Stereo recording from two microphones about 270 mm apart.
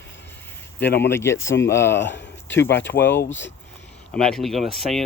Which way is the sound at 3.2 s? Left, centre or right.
Left.